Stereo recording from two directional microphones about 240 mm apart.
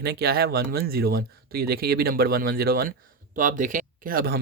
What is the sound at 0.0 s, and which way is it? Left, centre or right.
Speech, right.